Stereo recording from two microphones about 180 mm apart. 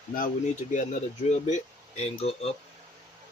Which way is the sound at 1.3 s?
40° left (ahead or behind).